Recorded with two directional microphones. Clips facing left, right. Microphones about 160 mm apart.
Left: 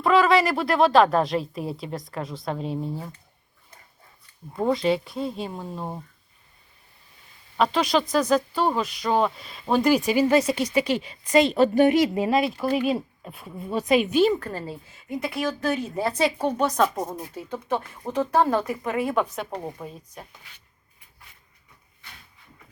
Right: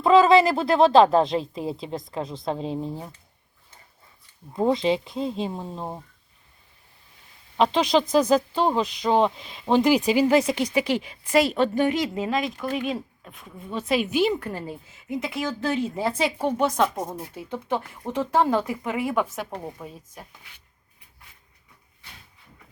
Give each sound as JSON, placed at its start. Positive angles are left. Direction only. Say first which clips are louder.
{"t": 0.0, "sound": "speech", "louder": "right 3 dB", "side_deg": -25}
{"t": 4.5, "sound": "speech", "louder": "right 1 dB", "side_deg": -25}
{"t": 7.6, "sound": "speech", "louder": "right 2 dB", "side_deg": -25}
{"t": 11.5, "sound": "a woman's voice", "louder": "left 4 dB", "side_deg": 10}
{"t": 14.2, "sound": "a woman's voice", "louder": "left 2 dB", "side_deg": -15}
{"t": 16.9, "sound": "a woman's voice", "louder": "left 1 dB", "side_deg": 10}
{"t": 17.2, "sound": "a woman's voice", "louder": "even", "side_deg": -10}
{"t": 19.5, "sound": "a woman's voice", "louder": "left 2 dB", "side_deg": 10}